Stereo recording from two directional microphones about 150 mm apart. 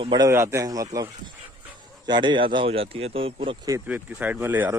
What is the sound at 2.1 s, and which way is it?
Speech, 30° right (ahead or behind).